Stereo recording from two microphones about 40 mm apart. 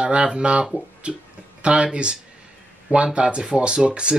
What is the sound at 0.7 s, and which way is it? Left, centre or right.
Speech, right.